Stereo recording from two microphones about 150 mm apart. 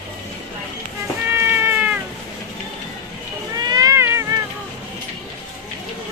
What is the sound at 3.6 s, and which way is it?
Cat, 25° right (ahead or behind).